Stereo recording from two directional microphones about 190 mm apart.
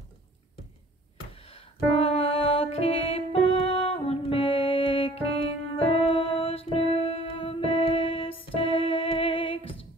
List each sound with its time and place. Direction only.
1.3 s music: 30° left (ahead or behind)